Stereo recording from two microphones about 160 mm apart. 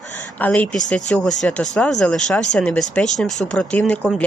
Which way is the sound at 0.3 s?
10° left (ahead or behind).